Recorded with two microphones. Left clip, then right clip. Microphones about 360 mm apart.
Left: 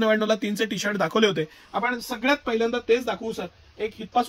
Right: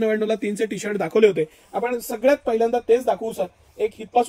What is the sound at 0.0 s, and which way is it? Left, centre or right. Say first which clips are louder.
A man's voice: even; left.